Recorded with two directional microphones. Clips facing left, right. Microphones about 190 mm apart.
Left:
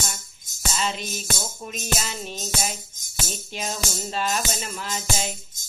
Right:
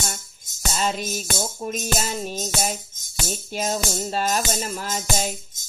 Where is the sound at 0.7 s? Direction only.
45° right (ahead or behind).